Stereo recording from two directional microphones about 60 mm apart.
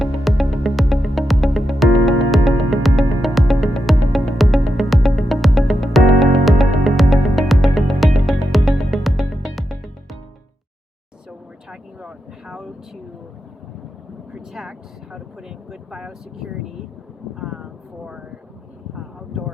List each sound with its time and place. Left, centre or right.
0.0 s music: centre
11.3 s vehicle: centre
14.3 s a sound: centre
17.6 s vehicle: centre